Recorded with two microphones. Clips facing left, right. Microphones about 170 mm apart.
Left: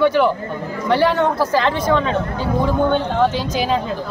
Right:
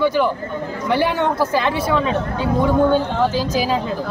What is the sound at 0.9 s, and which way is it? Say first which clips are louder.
Speech: left 2 dB; 10° right (ahead or behind).